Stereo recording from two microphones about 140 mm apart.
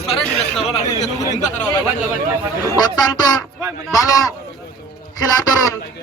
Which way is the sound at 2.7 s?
30° left (ahead or behind).